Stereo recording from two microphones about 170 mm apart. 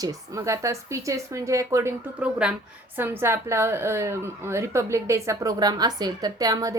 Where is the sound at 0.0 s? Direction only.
20° right (ahead or behind).